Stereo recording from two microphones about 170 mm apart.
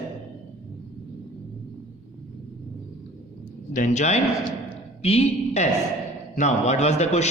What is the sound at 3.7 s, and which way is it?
A man's voice, 45° left (ahead or behind).